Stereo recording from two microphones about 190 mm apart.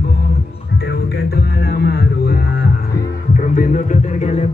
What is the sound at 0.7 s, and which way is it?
Music, 60° left (ahead or behind).